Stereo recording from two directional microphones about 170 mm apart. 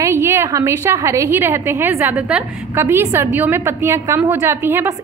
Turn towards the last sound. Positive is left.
turn(degrees=-15)  # may be behind; listen again after turning